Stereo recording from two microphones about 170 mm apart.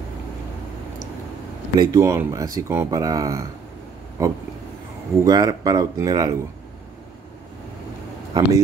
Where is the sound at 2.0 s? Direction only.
15° right (ahead or behind).